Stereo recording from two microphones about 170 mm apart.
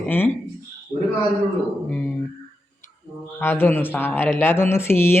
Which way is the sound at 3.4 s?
10° left (ahead or behind).